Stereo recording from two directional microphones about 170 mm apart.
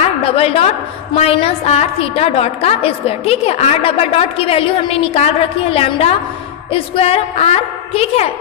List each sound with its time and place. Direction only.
0.2 s a woman's voice: 35° left (ahead or behind)